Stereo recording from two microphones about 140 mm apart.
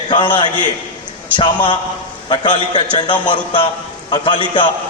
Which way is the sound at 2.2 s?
35° left (ahead or behind).